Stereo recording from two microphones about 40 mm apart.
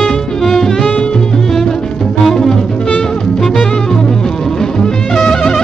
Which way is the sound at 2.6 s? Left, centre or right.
Left.